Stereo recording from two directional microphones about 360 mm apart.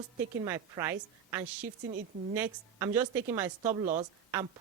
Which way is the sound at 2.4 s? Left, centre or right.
Centre.